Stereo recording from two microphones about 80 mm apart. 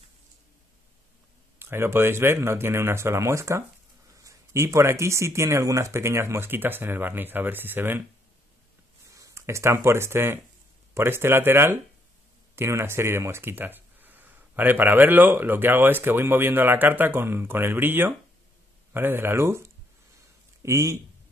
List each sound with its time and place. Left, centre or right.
1.6 s speech: right
9.1 s speech: right